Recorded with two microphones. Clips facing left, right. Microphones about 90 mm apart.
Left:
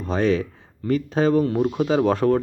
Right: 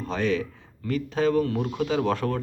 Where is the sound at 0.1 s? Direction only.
30° left (ahead or behind).